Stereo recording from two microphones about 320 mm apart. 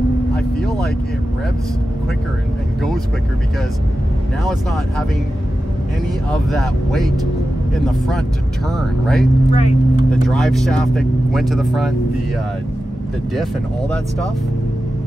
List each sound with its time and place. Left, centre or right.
6.3 s speech: centre
8.7 s speech: centre
9.5 s speech: left
10.2 s speech: centre
13.3 s speech: centre